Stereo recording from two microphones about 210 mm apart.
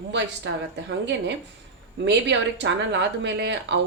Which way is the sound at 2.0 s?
55° right (ahead or behind).